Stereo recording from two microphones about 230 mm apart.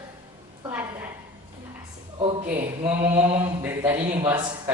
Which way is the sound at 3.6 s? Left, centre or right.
Centre.